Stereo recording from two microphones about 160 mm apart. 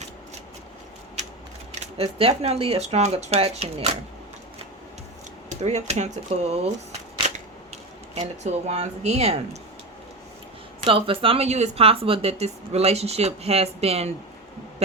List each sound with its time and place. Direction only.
1.8 s a woman's voice: 40° right (ahead or behind)
5.5 s speech: 45° right (ahead or behind)
7.2 s camera: 45° right (ahead or behind)
10.8 s a woman's voice: 35° right (ahead or behind)
14.8 s a sound: 40° right (ahead or behind)